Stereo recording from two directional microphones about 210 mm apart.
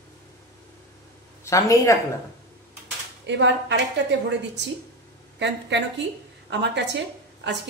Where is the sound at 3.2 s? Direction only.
55° right (ahead or behind).